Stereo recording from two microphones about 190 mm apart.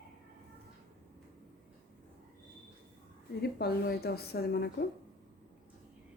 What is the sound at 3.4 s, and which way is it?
A woman's voice, 55° left (ahead or behind).